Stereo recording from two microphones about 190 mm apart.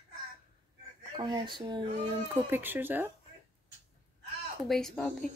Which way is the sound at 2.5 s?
10° right (ahead or behind).